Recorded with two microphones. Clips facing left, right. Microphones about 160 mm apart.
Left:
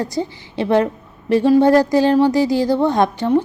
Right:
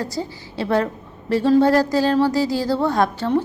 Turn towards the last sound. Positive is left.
turn(degrees=15)  # may be behind; listen again after turning